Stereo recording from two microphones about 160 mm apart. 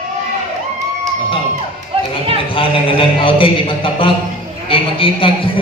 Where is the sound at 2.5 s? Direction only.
35° left (ahead or behind).